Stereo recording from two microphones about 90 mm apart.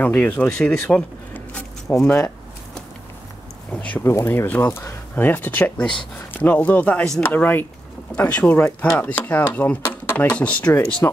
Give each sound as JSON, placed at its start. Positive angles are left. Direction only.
{"t": 0.0, "sound": "speech", "side_deg": 20}
{"t": 3.7, "sound": "speech", "side_deg": 15}
{"t": 4.0, "sound": "speech", "side_deg": 25}